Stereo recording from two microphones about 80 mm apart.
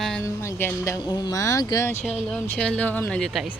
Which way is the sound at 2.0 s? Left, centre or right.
Centre.